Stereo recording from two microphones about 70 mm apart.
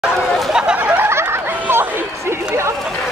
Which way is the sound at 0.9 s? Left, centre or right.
Right.